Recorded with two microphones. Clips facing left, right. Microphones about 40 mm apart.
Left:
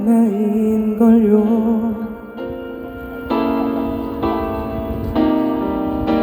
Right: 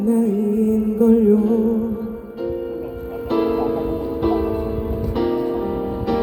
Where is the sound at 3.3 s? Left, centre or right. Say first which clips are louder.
Left 1 dB; left.